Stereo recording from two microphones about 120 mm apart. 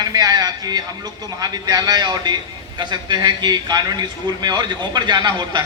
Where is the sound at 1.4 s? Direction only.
35° right (ahead or behind).